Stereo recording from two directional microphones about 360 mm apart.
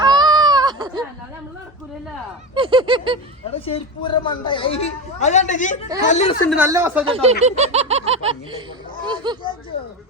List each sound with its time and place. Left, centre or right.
0.0 s a sound: centre
2.6 s speech: centre
3.7 s a woman's voice: centre
6.5 s speech: centre
7.2 s speech: centre